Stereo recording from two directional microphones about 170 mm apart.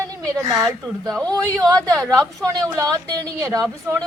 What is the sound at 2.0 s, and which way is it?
Speech, centre (ahead or behind).